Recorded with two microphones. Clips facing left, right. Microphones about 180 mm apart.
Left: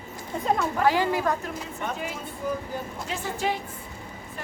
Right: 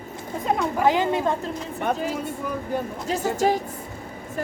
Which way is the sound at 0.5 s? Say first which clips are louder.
Right 3 dB; 15° right (ahead or behind).